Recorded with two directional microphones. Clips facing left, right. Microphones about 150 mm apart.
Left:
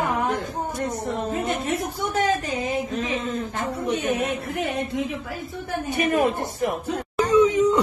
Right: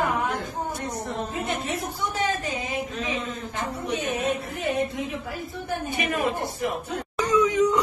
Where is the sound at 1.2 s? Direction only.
50° left (ahead or behind); by 4.7 s 65° left (ahead or behind).